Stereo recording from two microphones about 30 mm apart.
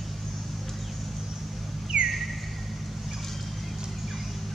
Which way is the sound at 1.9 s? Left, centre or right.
Right.